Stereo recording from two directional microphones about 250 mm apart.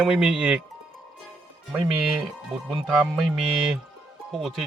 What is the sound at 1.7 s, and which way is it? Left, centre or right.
Speech, centre.